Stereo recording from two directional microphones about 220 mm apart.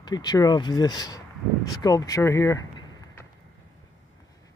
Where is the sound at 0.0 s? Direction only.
20° left (ahead or behind).